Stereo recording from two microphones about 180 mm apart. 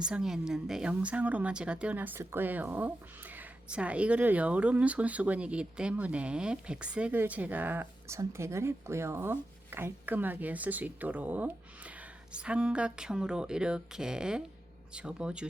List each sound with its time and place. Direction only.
0.0 s a woman's voice: 5° right (ahead or behind)